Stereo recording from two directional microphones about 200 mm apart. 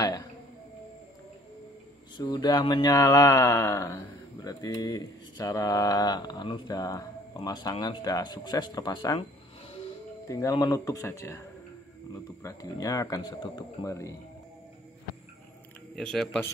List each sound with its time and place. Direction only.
2.1 s speech: 20° left (ahead or behind)
10.2 s speech: 15° left (ahead or behind)
12.4 s speech: 15° left (ahead or behind)
15.9 s speech: 5° left (ahead or behind)